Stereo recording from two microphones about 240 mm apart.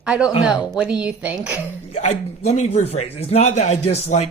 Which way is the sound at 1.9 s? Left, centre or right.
Left.